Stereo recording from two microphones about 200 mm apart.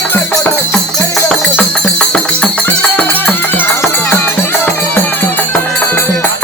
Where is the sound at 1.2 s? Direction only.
5° left (ahead or behind).